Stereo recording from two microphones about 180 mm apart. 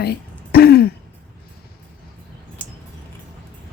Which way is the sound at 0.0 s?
60° left (ahead or behind).